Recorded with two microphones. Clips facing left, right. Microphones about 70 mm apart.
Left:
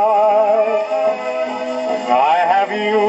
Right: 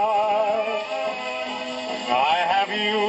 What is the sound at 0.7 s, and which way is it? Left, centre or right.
Music, centre.